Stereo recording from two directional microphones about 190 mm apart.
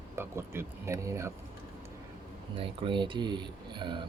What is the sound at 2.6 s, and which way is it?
Speech, 25° right (ahead or behind).